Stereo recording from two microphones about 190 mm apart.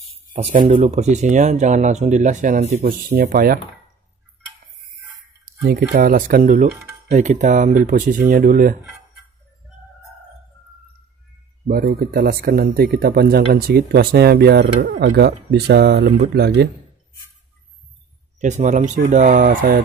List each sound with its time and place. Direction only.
0.4 s speech: 35° right (ahead or behind)
3.1 s speech: 50° right (ahead or behind)
5.4 s speech: 55° right (ahead or behind)
11.6 s speech: 55° right (ahead or behind)
18.4 s speech: 40° right (ahead or behind)